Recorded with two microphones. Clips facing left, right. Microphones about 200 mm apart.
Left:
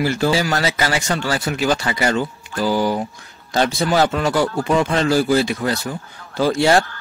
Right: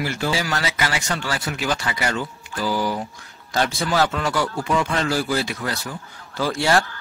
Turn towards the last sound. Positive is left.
turn(degrees=25)  # may be behind; listen again after turning